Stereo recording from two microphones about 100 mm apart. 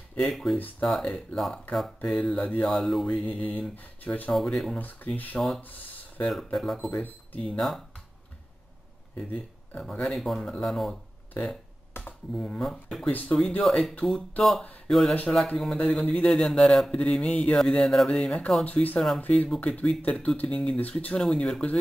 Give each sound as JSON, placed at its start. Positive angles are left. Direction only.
{"t": 0.2, "sound": "speech", "side_deg": 5}
{"t": 0.6, "sound": "speech", "side_deg": 15}
{"t": 1.1, "sound": "speech", "side_deg": 5}
{"t": 3.1, "sound": "speech", "side_deg": 15}
{"t": 4.3, "sound": "speech", "side_deg": 5}
{"t": 4.7, "sound": "speech", "side_deg": 15}
{"t": 5.6, "sound": "a sound", "side_deg": 15}
{"t": 6.2, "sound": "speech", "side_deg": 0}
{"t": 6.9, "sound": "speech", "side_deg": 15}
{"t": 7.5, "sound": "speech", "side_deg": 0}
{"t": 9.8, "sound": "speech", "side_deg": 5}
{"t": 11.9, "sound": "computer keyboard", "side_deg": 20}
{"t": 12.4, "sound": "speech", "side_deg": 5}
{"t": 13.1, "sound": "speech", "side_deg": 15}